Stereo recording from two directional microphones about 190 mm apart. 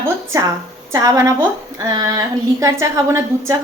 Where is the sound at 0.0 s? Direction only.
15° right (ahead or behind).